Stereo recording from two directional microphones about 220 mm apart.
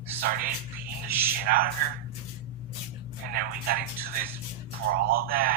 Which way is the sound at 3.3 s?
40° right (ahead or behind).